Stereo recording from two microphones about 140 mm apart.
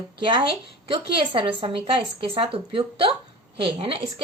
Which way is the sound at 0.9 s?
35° right (ahead or behind).